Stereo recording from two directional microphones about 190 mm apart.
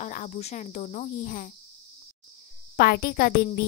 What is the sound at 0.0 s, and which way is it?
Cricket, 40° left (ahead or behind).